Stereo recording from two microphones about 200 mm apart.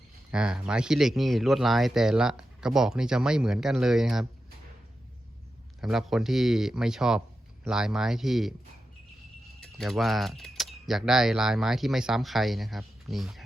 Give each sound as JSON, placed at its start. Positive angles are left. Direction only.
{"t": 0.3, "sound": "speech", "side_deg": -5}
{"t": 5.8, "sound": "speech", "side_deg": 0}
{"t": 9.6, "sound": "speech", "side_deg": 0}